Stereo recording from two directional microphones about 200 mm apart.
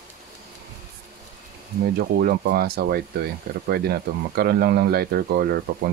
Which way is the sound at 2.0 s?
50° right (ahead or behind).